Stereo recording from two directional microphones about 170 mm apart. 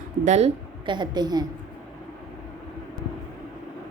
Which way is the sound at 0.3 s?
40° right (ahead or behind).